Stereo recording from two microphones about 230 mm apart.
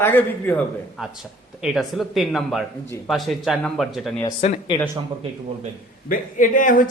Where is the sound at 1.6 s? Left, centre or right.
Centre.